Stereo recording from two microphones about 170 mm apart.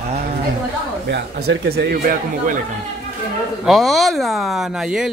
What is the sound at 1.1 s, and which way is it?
Speech, 75° right (ahead or behind).